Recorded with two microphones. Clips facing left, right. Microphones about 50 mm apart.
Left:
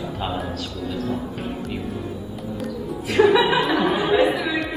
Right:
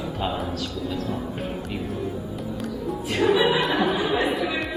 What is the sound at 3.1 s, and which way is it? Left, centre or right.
Chuckle, left.